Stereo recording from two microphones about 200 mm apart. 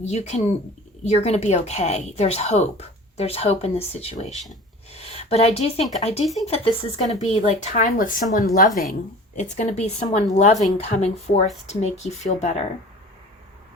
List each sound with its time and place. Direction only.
0.0 s a woman's voice: 35° left (ahead or behind)
4.9 s a sound: 30° left (ahead or behind)
6.0 s a woman's voice: 30° left (ahead or behind)